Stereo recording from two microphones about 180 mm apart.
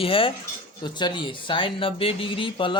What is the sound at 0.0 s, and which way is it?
Speech, 30° left (ahead or behind).